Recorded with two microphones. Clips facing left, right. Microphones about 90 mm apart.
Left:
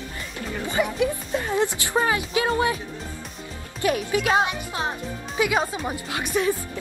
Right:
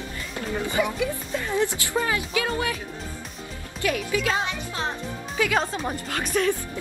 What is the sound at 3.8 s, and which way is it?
A woman's voice, 25° left (ahead or behind).